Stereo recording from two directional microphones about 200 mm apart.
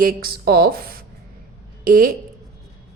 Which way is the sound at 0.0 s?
50° right (ahead or behind).